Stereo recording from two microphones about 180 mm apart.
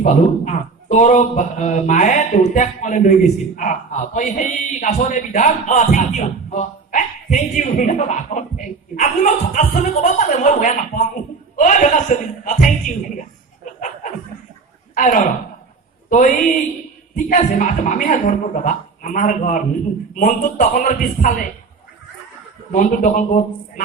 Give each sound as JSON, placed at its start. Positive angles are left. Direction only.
{"t": 0.0, "sound": "a man's voice", "side_deg": 40}
{"t": 14.9, "sound": "a man's voice", "side_deg": 45}
{"t": 22.7, "sound": "a man's voice", "side_deg": 45}